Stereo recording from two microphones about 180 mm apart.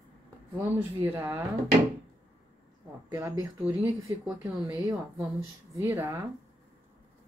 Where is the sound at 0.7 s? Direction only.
10° right (ahead or behind).